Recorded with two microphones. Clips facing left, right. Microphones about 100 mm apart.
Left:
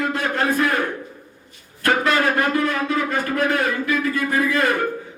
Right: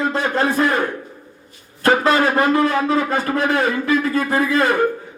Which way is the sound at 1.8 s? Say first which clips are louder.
Right 3 dB; 30° right (ahead or behind).